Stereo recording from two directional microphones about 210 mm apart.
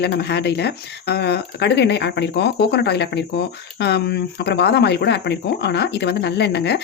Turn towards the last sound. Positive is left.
turn(degrees=55)  # may be behind; listen again after turning